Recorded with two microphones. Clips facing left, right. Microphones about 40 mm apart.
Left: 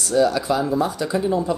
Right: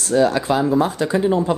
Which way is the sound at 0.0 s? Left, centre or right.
Right.